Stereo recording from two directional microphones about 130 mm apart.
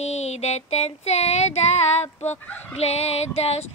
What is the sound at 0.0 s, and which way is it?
Female singing, 55° left (ahead or behind).